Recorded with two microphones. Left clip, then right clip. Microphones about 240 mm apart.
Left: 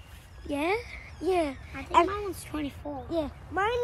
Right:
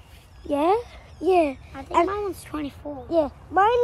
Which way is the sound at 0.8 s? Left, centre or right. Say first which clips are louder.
Right 6 dB; centre.